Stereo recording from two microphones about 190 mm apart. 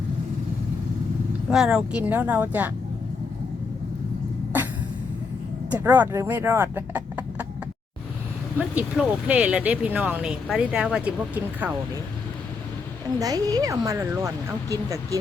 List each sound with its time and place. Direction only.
1.5 s speech: 5° right (ahead or behind)
5.7 s speech: 10° right (ahead or behind)
8.5 s speech: 5° right (ahead or behind)
13.1 s speech: 20° right (ahead or behind)